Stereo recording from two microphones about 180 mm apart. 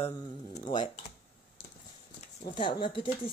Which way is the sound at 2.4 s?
25° left (ahead or behind).